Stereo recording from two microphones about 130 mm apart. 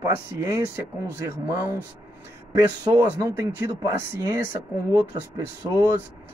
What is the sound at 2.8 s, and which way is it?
Speech, 30° right (ahead or behind).